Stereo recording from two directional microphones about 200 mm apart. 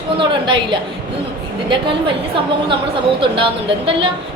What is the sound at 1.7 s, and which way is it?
Speech, 25° right (ahead or behind).